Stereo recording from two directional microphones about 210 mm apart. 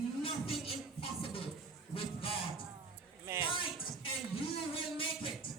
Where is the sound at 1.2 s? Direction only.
25° left (ahead or behind).